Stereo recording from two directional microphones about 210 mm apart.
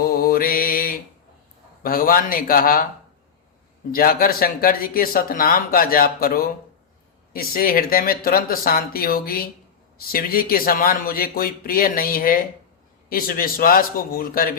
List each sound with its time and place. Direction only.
0.0 s mantra: 45° left (ahead or behind)
1.8 s speech: 45° left (ahead or behind)
3.9 s speech: 45° left (ahead or behind)